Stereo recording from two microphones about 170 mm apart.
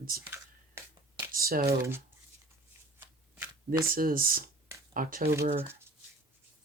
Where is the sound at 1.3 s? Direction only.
60° right (ahead or behind).